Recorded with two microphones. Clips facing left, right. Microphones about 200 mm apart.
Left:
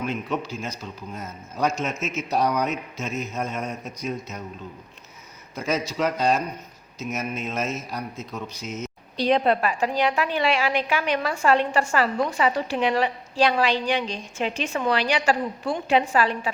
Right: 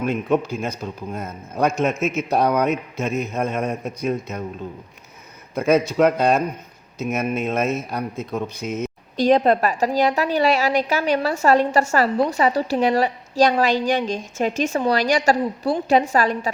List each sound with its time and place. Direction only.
0.0 s a man's voice: 50° right (ahead or behind)
5.5 s a man's voice: 55° right (ahead or behind)